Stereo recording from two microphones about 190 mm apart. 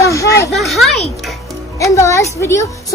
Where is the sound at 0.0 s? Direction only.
15° left (ahead or behind).